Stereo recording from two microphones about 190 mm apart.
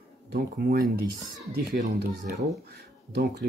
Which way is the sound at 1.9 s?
55° right (ahead or behind).